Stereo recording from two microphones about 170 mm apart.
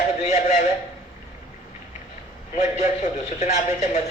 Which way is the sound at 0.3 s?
45° left (ahead or behind).